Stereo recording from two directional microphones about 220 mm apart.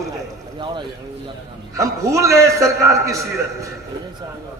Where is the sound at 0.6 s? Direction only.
20° right (ahead or behind).